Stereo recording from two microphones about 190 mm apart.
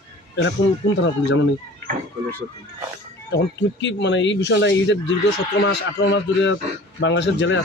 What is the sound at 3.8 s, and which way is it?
Speech, 70° left (ahead or behind).